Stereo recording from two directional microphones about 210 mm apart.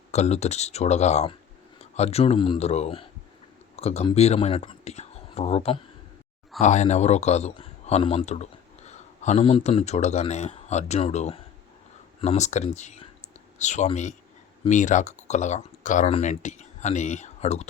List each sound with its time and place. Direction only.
0.1 s speech: 30° left (ahead or behind)